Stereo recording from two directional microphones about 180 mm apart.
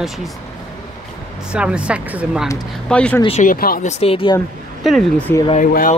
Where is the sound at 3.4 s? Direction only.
55° left (ahead or behind).